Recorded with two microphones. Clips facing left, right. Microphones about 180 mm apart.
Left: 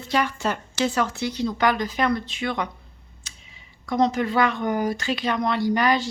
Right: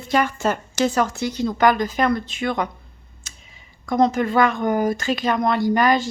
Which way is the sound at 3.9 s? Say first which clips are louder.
Right 3 dB; 50° right (ahead or behind).